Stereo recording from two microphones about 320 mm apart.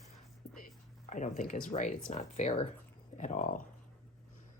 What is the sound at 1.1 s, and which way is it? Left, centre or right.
Speech, left.